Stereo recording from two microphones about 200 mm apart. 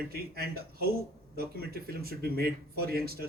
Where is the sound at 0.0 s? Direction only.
50° right (ahead or behind).